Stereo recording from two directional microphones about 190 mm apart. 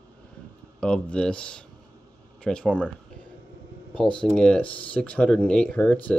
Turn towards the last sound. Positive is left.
turn(degrees=10)  # may be behind; listen again after turning